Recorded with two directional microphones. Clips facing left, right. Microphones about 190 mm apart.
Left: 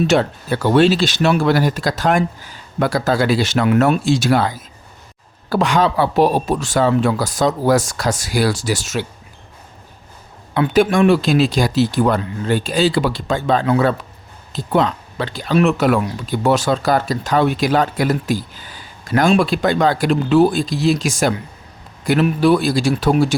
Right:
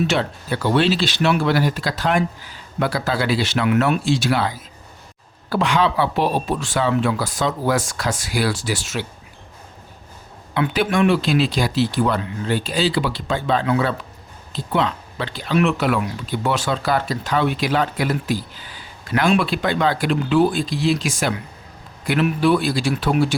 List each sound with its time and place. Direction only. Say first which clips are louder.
0.0 s speech: left 5 dB; 45° left (ahead or behind)
10.5 s speech: left 5 dB; 40° left (ahead or behind)